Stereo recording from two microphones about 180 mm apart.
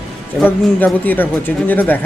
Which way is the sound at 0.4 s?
10° left (ahead or behind).